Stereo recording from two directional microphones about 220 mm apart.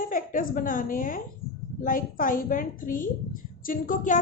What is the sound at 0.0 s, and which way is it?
A woman's voice, 40° left (ahead or behind).